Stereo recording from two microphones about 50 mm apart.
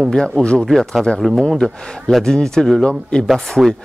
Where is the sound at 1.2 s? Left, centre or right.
Centre.